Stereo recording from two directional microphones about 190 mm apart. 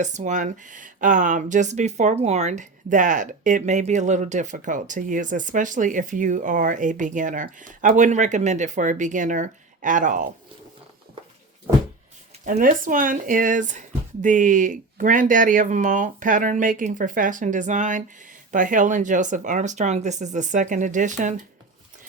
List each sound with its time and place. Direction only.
0.0 s speech: 40° right (ahead or behind)
12.5 s speech: 45° right (ahead or behind)